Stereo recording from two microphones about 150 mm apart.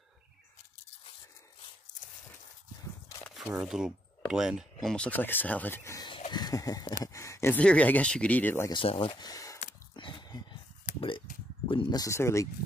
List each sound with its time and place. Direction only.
3.4 s speech: 5° right (ahead or behind); by 5.9 s 10° left (ahead or behind)
5.9 s a sound: 35° left (ahead or behind)
7.1 s speech: 20° left (ahead or behind)
8.6 s speech: 35° left (ahead or behind)
9.9 s a sound: 30° left (ahead or behind)
11.6 s speech: 35° left (ahead or behind); by 12.4 s 20° left (ahead or behind)